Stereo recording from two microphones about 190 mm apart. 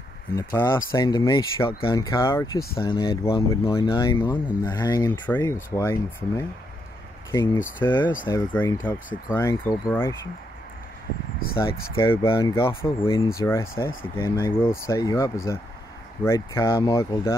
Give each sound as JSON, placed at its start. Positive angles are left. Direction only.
{"t": 0.4, "sound": "speech", "side_deg": 20}
{"t": 2.0, "sound": "speech", "side_deg": 15}
{"t": 11.5, "sound": "speech", "side_deg": 25}
{"t": 13.4, "sound": "speech", "side_deg": 15}